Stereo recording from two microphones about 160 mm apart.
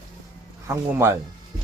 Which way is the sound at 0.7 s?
15° right (ahead or behind).